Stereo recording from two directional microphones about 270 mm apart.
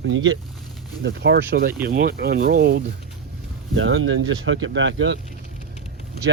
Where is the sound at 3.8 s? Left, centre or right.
Right.